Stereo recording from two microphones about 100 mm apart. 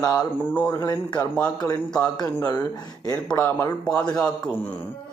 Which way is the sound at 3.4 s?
25° left (ahead or behind).